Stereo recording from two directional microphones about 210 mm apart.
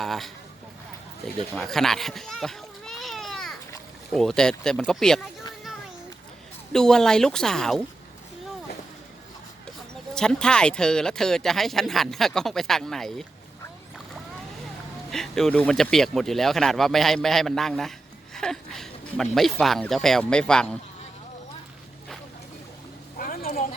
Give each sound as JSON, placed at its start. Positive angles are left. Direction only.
{"t": 0.0, "sound": "speech", "side_deg": 0}
{"t": 1.5, "sound": "a sound", "side_deg": 0}
{"t": 4.1, "sound": "speech", "side_deg": 5}
{"t": 6.7, "sound": "speech", "side_deg": 5}
{"t": 10.2, "sound": "speech", "side_deg": 5}
{"t": 15.1, "sound": "speech", "side_deg": 0}
{"t": 23.1, "sound": "a sound", "side_deg": 45}